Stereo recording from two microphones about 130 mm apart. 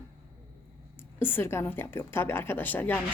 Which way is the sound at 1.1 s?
15° left (ahead or behind).